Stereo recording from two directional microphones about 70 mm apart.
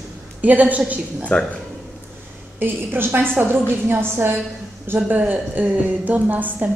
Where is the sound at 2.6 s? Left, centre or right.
Right.